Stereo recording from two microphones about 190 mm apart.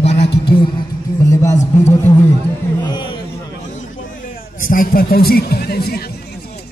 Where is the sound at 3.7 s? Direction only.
40° left (ahead or behind).